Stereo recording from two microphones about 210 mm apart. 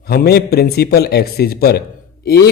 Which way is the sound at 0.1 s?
50° left (ahead or behind).